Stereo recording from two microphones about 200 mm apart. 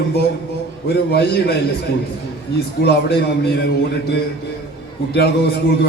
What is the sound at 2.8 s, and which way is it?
Speech, 55° left (ahead or behind).